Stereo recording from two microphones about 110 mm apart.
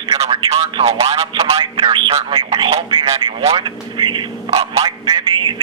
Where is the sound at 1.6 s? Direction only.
45° right (ahead or behind).